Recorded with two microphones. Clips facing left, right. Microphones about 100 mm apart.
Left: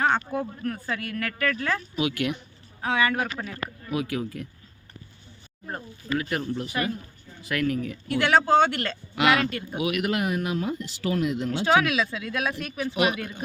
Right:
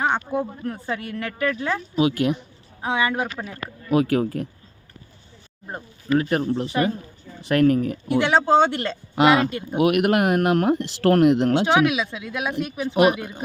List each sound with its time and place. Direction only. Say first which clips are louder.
0.0 s speech: right 2 dB; 20° right (ahead or behind)
2.0 s speech: right 9 dB; 35° right (ahead or behind)
2.8 s speech: right 2 dB; 20° right (ahead or behind)
3.9 s speech: right 10 dB; 45° right (ahead or behind)
5.6 s speech: right 5 dB; 15° right (ahead or behind)
6.1 s speech: right 7 dB; 35° right (ahead or behind)
7.5 s speech: right 9 dB; 40° right (ahead or behind)
8.0 s speech: right 1 dB; 20° right (ahead or behind)
9.7 s speech: right 9 dB; 55° right (ahead or behind); by 11.6 s 75° right (ahead or behind)
11.6 s speech: right 3 dB; 20° right (ahead or behind)